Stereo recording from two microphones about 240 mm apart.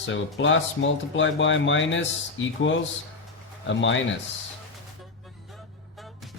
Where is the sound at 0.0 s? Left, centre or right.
Left.